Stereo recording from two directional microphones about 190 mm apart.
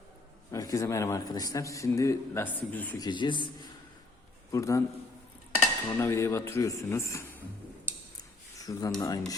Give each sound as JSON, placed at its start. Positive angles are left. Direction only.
{"t": 0.5, "sound": "a man's voice", "side_deg": 15}
{"t": 3.0, "sound": "a man's voice", "side_deg": 25}
{"t": 6.0, "sound": "a man's voice", "side_deg": 15}
{"t": 7.9, "sound": "a sound", "side_deg": 10}
{"t": 8.6, "sound": "speech", "side_deg": 20}